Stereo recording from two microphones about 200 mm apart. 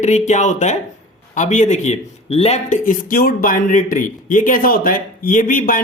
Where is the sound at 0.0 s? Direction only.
35° left (ahead or behind).